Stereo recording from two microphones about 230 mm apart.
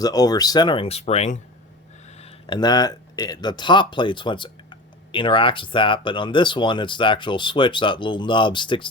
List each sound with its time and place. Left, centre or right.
0.0 s speech: centre